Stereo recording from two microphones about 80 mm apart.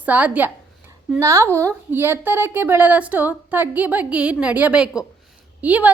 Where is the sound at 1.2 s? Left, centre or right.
Right.